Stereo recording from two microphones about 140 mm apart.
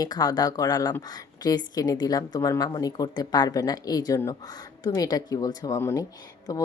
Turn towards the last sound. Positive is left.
turn(degrees=25)  # may be behind; listen again after turning